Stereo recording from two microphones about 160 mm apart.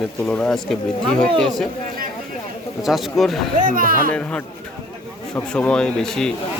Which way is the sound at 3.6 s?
60° right (ahead or behind).